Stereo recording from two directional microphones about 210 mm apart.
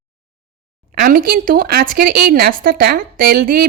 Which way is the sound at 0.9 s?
45° right (ahead or behind).